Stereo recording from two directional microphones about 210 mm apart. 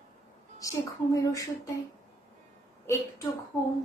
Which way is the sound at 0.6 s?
15° left (ahead or behind).